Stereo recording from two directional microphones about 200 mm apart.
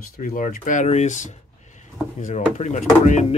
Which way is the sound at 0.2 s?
45° left (ahead or behind).